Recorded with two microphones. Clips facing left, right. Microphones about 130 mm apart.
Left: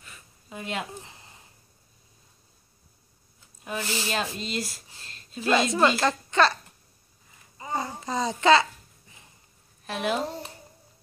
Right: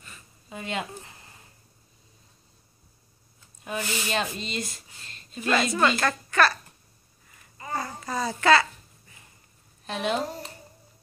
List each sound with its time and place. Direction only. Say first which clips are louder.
0.0 s a sound: right 1 dB; 5° left (ahead or behind)
1.0 s a sound: even; 20° left (ahead or behind)
3.6 s speech: even; centre (ahead or behind)
5.9 s speech: left 1 dB; 20° left (ahead or behind)
7.5 s babbling: left 1 dB; 20° left (ahead or behind)
9.8 s speech: even; 5° left (ahead or behind)